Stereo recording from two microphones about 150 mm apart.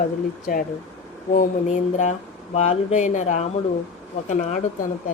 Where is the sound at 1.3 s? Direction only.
60° left (ahead or behind).